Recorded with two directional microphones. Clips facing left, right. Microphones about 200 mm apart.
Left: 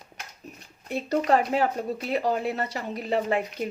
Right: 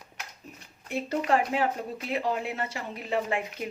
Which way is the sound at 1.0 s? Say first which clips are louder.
Left 4 dB; 40° left (ahead or behind).